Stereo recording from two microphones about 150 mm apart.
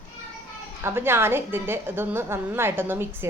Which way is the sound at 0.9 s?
15° right (ahead or behind).